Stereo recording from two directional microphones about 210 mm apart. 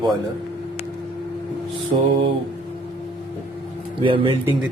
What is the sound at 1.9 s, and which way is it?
Speech, 30° right (ahead or behind).